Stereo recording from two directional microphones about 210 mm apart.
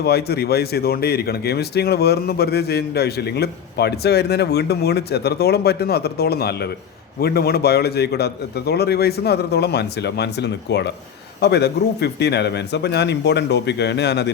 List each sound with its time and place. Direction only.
0.0 s speech: 50° left (ahead or behind)